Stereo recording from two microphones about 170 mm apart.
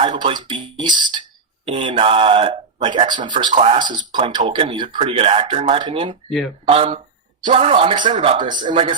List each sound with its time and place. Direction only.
0.0 s speech: 35° right (ahead or behind)